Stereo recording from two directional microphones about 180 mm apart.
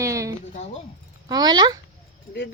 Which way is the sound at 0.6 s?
40° left (ahead or behind).